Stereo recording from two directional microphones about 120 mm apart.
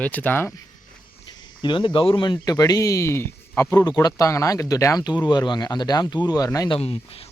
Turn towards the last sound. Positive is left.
turn(degrees=55)  # may be behind; listen again after turning